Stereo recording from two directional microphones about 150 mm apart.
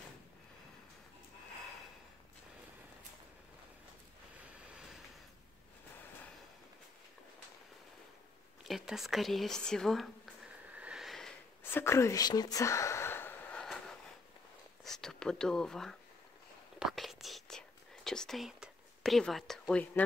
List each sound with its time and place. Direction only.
8.6 s speech: centre (ahead or behind)
10.7 s sniff: 10° right (ahead or behind)
11.7 s whispering: 15° left (ahead or behind)
14.8 s speech: centre (ahead or behind)
16.8 s whispering: centre (ahead or behind)